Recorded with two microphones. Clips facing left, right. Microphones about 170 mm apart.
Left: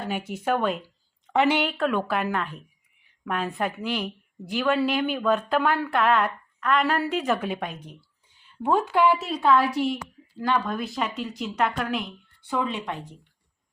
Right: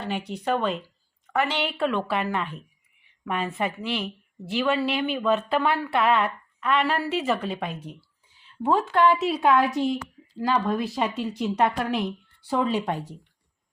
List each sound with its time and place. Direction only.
0.0 s a woman's voice: 5° left (ahead or behind)
1.3 s a woman's voice: 20° left (ahead or behind)
1.5 s a woman's voice: centre (ahead or behind)
9.2 s a woman's voice: 10° right (ahead or behind); by 13.1 s 35° right (ahead or behind)